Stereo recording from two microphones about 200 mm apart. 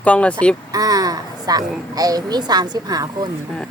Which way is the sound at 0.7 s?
20° right (ahead or behind).